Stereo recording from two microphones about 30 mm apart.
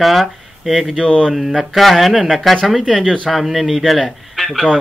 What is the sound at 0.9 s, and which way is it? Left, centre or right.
Speech, left.